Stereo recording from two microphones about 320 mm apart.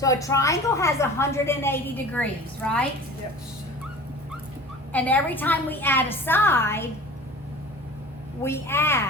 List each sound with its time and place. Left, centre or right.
0.0 s a woman's voice: centre
4.9 s a woman's voice: centre
8.4 s a woman's voice: centre